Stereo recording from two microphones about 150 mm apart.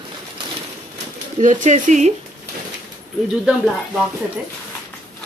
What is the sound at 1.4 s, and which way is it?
Speech, 55° right (ahead or behind).